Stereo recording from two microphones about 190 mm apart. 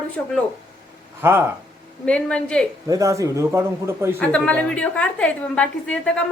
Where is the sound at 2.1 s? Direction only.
5° left (ahead or behind).